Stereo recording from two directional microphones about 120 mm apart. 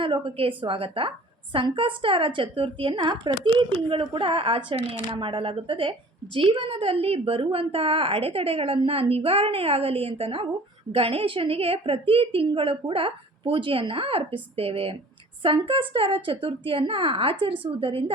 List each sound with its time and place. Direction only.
0.0 s a woman's voice: 45° right (ahead or behind)